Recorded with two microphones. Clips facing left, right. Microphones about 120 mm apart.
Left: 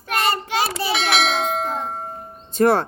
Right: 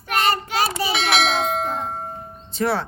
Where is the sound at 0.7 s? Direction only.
Centre (ahead or behind).